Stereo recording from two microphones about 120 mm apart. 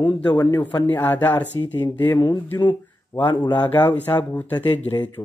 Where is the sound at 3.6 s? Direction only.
15° left (ahead or behind).